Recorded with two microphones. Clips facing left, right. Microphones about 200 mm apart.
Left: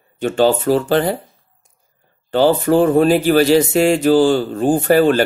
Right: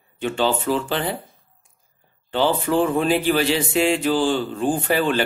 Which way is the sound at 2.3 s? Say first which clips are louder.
Left 7 dB; 40° left (ahead or behind).